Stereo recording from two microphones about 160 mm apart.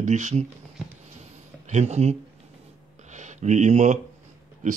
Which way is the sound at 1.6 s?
45° right (ahead or behind).